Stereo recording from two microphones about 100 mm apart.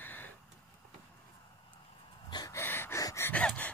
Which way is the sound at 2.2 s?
45° left (ahead or behind).